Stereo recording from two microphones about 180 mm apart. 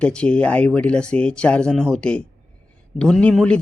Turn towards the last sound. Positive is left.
turn(degrees=5)  # may be behind; listen again after turning